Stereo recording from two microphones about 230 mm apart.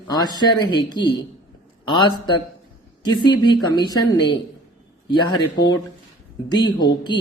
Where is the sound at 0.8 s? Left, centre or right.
Centre.